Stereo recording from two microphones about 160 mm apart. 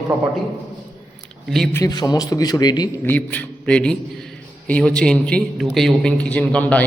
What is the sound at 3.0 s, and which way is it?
A man's voice, 10° left (ahead or behind).